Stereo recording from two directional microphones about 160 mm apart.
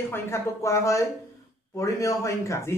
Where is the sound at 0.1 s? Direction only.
20° left (ahead or behind).